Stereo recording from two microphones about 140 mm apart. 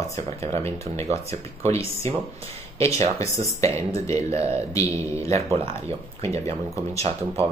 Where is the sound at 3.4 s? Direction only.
20° left (ahead or behind).